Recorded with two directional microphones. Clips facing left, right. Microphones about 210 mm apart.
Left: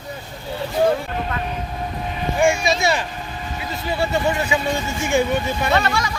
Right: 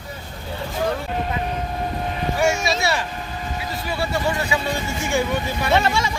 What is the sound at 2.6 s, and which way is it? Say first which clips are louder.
Vehicle: left 2 dB; 20° left (ahead or behind).